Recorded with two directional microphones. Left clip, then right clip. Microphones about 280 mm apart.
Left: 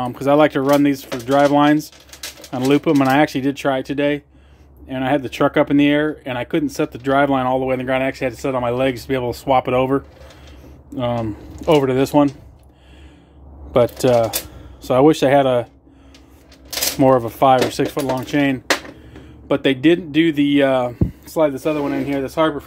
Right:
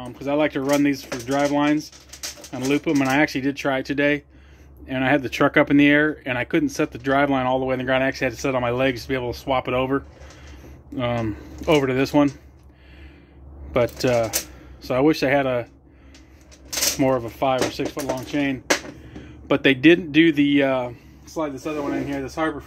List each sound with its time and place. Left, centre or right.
0.0 s speech: left; by 12.3 s centre
13.7 s speech: centre
17.0 s speech: left
19.4 s a man's voice: centre
21.3 s speech: left